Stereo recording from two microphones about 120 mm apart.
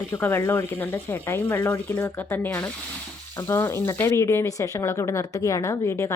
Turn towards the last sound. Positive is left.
turn(degrees=20)  # may be behind; listen again after turning